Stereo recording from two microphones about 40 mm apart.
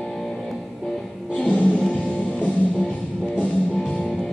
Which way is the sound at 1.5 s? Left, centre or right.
Left.